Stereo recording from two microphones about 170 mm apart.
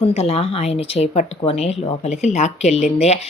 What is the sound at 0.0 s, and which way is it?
A woman's voice, 35° left (ahead or behind).